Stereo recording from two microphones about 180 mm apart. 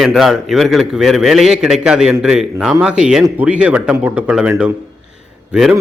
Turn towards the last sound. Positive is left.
turn(degrees=-5)  # may be behind; listen again after turning